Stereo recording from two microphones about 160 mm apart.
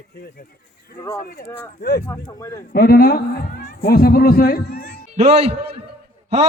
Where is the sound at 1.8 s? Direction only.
80° left.